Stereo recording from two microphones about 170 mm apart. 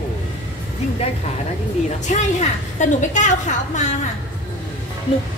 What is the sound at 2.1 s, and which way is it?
A woman's voice, 45° left (ahead or behind).